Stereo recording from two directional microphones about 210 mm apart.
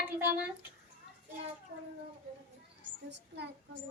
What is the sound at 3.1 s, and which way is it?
Speech, 55° right (ahead or behind).